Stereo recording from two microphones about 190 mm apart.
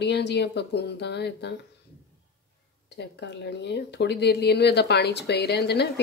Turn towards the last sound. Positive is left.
turn(degrees=60)  # may be behind; listen again after turning